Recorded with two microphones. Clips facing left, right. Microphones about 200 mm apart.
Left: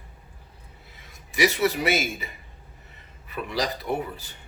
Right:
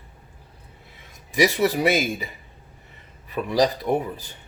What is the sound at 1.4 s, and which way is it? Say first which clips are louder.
Speech: right 3 dB; 40° right (ahead or behind).